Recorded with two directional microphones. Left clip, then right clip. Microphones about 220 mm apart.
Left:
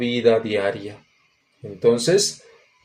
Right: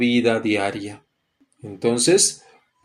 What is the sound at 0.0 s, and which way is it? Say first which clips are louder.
Speech: left 1 dB; 20° right (ahead or behind).